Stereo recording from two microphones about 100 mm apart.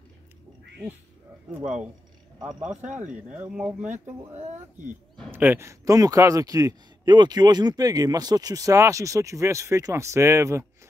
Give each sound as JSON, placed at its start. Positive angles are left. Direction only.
{"t": 1.5, "sound": "speech", "side_deg": -10}
{"t": 5.3, "sound": "speech", "side_deg": -20}